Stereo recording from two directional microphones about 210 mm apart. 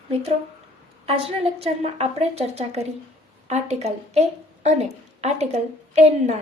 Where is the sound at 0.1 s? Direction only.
30° right (ahead or behind).